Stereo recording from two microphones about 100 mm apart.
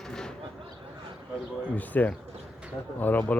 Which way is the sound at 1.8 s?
15° left (ahead or behind).